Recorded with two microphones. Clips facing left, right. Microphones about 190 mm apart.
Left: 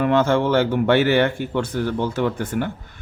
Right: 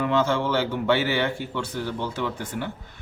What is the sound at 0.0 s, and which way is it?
Speech, 55° left (ahead or behind).